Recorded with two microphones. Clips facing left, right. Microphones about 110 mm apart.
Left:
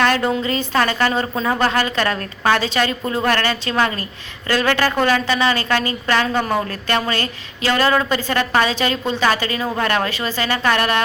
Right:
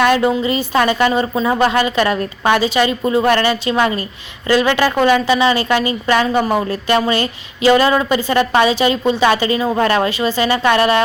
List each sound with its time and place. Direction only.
0.0 s a woman's voice: 15° right (ahead or behind)